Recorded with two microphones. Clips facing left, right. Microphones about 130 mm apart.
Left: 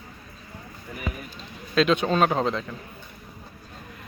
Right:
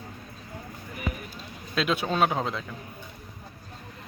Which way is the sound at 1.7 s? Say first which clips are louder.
Left 6 dB; 5° right (ahead or behind).